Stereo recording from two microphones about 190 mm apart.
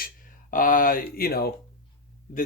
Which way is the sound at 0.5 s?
45° left (ahead or behind).